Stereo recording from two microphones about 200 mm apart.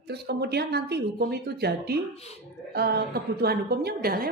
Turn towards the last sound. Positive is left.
turn(degrees=-50)  # may be behind; listen again after turning